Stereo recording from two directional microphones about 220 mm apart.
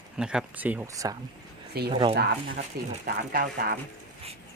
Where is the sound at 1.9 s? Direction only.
25° right (ahead or behind).